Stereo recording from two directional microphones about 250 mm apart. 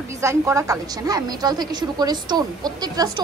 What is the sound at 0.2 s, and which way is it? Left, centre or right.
Speech, centre.